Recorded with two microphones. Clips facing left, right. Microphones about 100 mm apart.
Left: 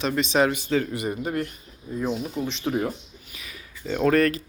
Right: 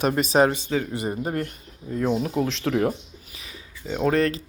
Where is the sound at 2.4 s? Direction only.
90° right; by 2.9 s 70° right (ahead or behind).